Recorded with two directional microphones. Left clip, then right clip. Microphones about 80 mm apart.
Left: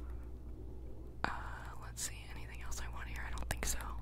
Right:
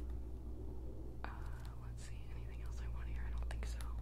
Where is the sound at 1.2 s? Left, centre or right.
Left.